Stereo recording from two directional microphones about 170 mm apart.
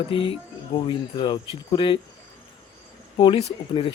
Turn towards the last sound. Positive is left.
turn(degrees=30)  # may be behind; listen again after turning